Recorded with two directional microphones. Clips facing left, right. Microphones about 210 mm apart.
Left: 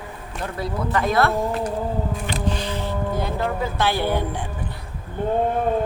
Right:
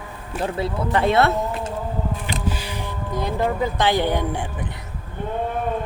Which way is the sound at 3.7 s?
15° right (ahead or behind).